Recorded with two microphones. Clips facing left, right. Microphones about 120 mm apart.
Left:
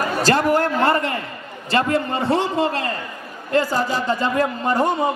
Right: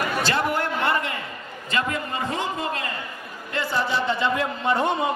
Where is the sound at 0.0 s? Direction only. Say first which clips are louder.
Left 5 dB; 40° left (ahead or behind).